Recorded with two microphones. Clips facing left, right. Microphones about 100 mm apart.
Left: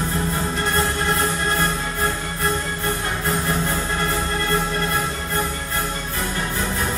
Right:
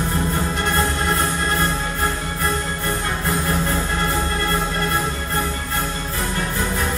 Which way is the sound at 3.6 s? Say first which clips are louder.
Right 1 dB; 30° right (ahead or behind).